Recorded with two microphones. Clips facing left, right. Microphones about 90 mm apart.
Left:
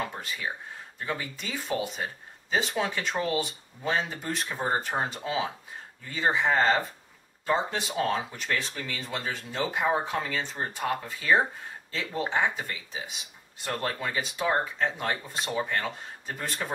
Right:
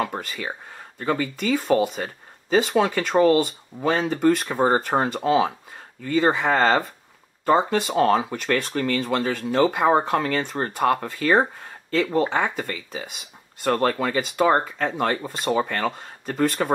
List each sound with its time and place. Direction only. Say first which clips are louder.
0.0 s speech: right 6 dB; 60° right (ahead or behind)